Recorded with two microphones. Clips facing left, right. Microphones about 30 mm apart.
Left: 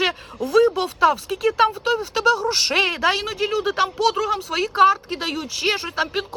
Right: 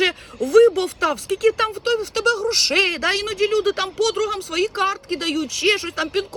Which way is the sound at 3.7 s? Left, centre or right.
Right.